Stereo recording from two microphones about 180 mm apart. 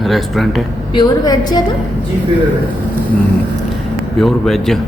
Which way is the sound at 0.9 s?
25° left (ahead or behind).